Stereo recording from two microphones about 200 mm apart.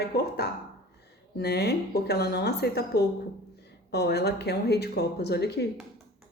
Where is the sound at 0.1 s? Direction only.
55° left (ahead or behind).